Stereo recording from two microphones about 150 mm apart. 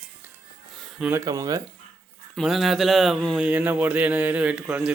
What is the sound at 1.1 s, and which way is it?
Speech, 25° right (ahead or behind).